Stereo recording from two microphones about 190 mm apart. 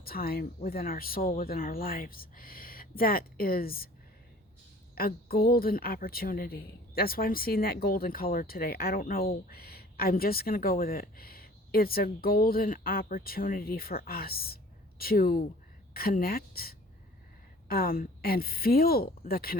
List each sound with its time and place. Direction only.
0.0 s a woman's voice: 50° left (ahead or behind)
4.9 s a woman's voice: 50° left (ahead or behind)